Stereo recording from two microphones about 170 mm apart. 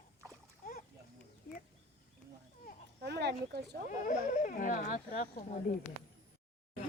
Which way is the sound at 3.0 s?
75° right (ahead or behind).